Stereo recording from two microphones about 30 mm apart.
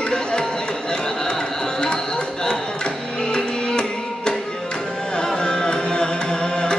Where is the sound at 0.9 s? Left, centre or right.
Left.